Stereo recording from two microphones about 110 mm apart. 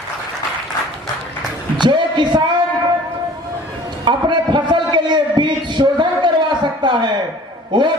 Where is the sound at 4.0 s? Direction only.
45° right (ahead or behind).